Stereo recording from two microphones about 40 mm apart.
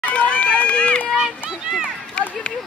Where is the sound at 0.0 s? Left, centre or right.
Left.